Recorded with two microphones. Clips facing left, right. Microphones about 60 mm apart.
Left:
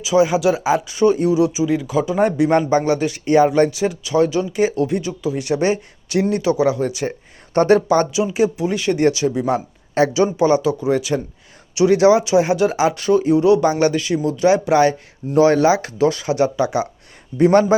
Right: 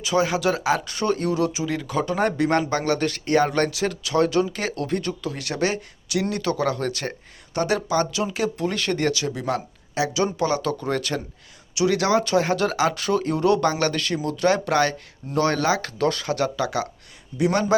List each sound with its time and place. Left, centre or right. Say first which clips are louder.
0.0 s speech: left 6 dB; centre
5.4 s speech: left 7 dB; left
7.5 s speech: left 9 dB; left
8.1 s speech: left 7 dB; centre
9.0 s speech: left 7 dB; centre
10.0 s speech: left 8 dB; left
10.3 s speech: left 8 dB; left
10.6 s speech: left 6 dB; centre
11.7 s speech: left 7 dB; left; by 13.7 s centre
13.7 s speech: left 6 dB; centre
16.3 s speech: left 6 dB; centre
17.3 s speech: left 8 dB; left